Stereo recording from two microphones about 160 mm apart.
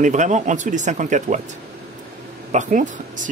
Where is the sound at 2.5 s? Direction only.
55° right (ahead or behind).